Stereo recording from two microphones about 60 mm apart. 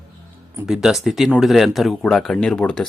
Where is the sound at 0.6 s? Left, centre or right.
Centre.